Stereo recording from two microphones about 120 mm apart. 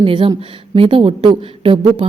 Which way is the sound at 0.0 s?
40° right (ahead or behind).